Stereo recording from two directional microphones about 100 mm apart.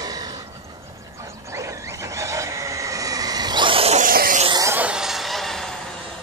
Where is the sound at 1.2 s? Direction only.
30° right (ahead or behind); by 3.8 s 55° right (ahead or behind).